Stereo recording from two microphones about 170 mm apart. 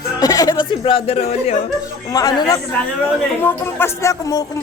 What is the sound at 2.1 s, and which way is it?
Speech, 20° left (ahead or behind).